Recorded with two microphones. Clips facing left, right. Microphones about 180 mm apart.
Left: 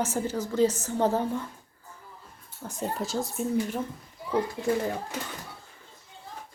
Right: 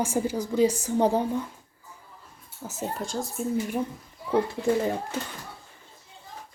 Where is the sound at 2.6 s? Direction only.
5° right (ahead or behind).